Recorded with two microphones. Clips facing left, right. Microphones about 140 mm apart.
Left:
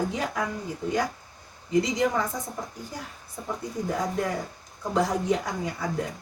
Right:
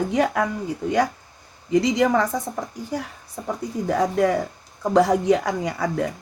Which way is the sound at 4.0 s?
90° right.